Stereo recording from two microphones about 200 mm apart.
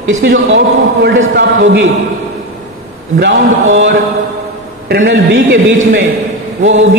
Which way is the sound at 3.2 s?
55° right (ahead or behind).